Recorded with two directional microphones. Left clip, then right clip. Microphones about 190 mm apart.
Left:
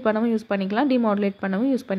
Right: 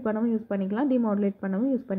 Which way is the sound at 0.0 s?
20° left (ahead or behind).